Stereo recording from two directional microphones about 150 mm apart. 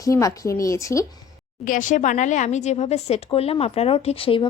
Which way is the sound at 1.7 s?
60° left (ahead or behind).